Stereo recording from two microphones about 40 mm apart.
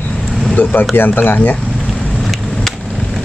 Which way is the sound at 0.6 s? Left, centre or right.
Left.